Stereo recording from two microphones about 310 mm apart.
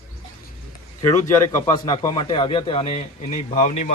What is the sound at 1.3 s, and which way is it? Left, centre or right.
A man's voice, centre.